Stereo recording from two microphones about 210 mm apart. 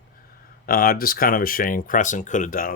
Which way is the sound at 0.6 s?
45° left (ahead or behind).